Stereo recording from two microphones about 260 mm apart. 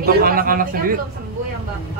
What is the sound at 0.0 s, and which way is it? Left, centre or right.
Speech, right.